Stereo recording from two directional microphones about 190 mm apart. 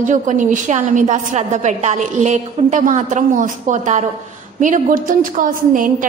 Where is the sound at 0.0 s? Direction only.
40° right (ahead or behind).